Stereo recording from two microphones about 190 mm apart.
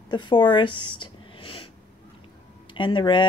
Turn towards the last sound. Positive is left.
turn(degrees=25)  # may be behind; listen again after turning